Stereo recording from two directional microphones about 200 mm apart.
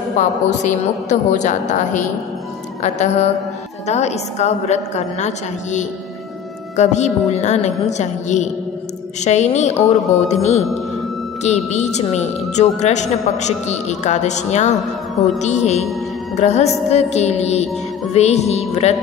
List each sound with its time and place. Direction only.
0.2 s a woman's voice: 35° left (ahead or behind)